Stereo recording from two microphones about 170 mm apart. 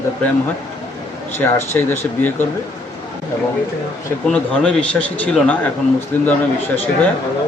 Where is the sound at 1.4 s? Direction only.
15° left (ahead or behind).